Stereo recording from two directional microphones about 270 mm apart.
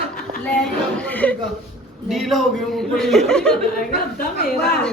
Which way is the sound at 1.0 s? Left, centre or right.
Centre.